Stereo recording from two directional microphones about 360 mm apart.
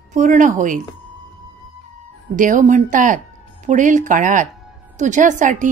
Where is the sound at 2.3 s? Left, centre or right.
Right.